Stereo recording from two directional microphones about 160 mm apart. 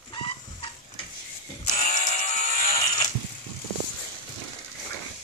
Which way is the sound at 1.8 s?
50° left (ahead or behind).